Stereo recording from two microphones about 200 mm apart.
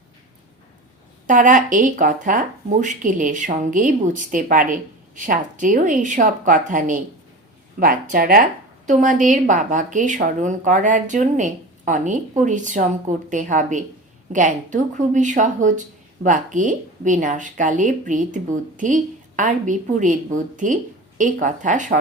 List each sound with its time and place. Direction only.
1.3 s speech: 40° right (ahead or behind)